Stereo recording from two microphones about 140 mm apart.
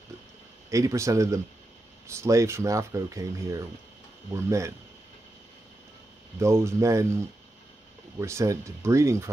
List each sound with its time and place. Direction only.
0.7 s speech: 25° right (ahead or behind)
6.4 s speech: 20° right (ahead or behind)
8.2 s speech: 20° right (ahead or behind)